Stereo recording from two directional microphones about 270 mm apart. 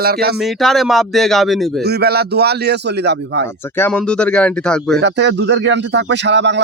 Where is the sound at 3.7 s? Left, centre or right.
Centre.